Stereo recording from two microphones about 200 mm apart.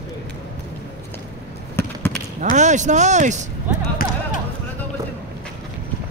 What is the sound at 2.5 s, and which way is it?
Speech, 35° right (ahead or behind).